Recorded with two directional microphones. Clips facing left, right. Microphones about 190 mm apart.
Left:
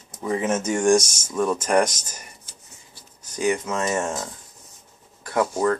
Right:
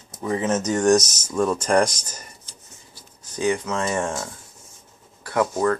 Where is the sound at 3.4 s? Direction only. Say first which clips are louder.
Even; 20° left (ahead or behind).